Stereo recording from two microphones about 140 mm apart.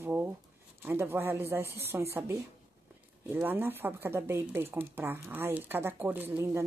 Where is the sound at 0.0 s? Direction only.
15° right (ahead or behind).